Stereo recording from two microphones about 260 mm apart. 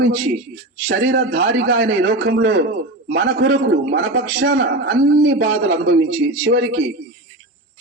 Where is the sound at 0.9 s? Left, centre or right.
Right.